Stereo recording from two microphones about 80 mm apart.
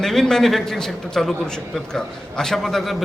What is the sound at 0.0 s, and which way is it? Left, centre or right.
A man's voice, centre.